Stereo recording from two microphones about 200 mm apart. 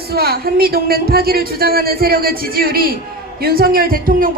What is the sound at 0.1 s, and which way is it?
A man's voice, 50° right (ahead or behind).